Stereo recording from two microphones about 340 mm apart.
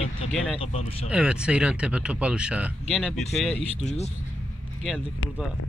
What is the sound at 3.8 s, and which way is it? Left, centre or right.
Speech, centre.